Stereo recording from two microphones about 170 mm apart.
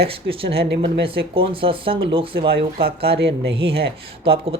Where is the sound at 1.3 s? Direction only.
30° right (ahead or behind).